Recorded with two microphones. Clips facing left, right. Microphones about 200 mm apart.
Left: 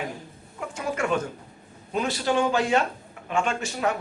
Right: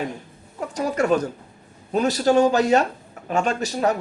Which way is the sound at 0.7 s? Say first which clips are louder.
Right 6 dB; 40° right (ahead or behind).